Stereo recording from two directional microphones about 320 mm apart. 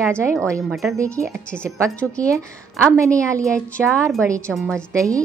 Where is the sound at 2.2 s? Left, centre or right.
Centre.